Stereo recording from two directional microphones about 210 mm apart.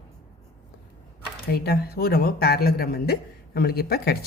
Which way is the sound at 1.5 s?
50° left (ahead or behind).